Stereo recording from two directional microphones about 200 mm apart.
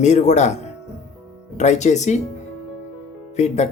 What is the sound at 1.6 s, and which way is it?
Speech, 35° left (ahead or behind).